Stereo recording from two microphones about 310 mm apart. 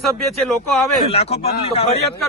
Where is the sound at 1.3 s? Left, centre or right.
Left.